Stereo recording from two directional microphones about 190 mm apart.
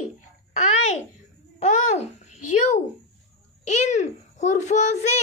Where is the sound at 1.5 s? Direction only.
35° left (ahead or behind).